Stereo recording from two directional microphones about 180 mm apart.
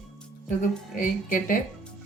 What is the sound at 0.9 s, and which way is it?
Speech, 50° left (ahead or behind).